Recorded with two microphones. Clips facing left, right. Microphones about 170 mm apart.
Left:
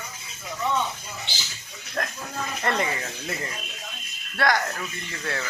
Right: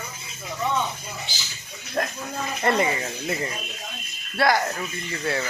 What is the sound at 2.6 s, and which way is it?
Speech, 15° right (ahead or behind).